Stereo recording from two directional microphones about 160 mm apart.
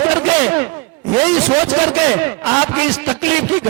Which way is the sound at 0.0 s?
10° right (ahead or behind).